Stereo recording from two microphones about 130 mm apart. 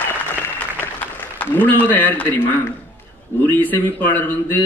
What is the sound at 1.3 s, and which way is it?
Speech, 15° left (ahead or behind).